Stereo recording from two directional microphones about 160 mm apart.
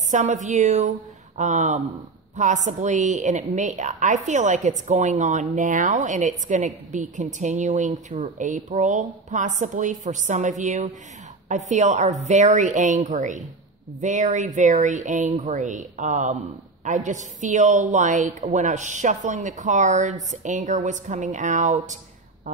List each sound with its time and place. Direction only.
0.1 s speech: 50° right (ahead or behind)